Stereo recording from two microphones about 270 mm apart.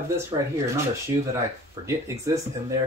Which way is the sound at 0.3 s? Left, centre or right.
Centre.